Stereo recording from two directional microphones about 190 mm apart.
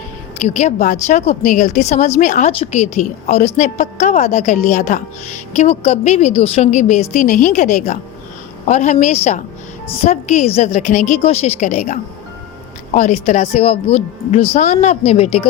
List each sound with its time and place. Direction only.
0.4 s a woman's voice: 35° left (ahead or behind)